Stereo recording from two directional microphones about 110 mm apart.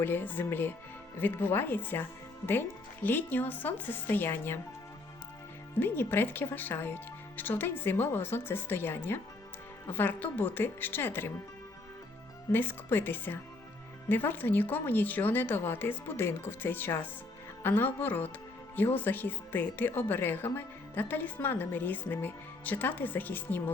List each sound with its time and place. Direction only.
0.0 s a woman's voice: 20° left (ahead or behind)
5.8 s speech: 20° left (ahead or behind)
12.5 s a woman's voice: 20° left (ahead or behind)